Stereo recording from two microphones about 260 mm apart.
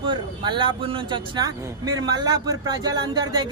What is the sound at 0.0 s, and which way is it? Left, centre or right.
Speech, centre.